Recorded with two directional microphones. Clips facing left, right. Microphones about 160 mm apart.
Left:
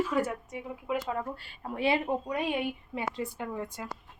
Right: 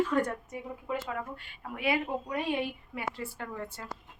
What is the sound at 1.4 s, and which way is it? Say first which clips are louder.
A woman's voice: left 3 dB; 30° left (ahead or behind).